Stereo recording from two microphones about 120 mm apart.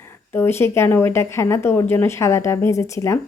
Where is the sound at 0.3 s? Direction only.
20° left (ahead or behind).